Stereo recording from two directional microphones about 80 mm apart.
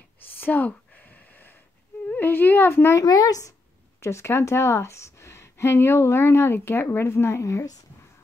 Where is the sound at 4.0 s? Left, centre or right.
Left.